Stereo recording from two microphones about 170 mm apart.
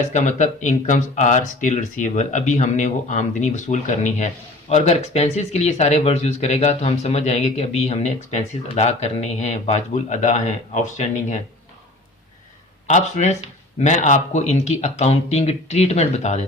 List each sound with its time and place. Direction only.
0.1 s speech: 45° left (ahead or behind)
12.9 s speech: 45° left (ahead or behind)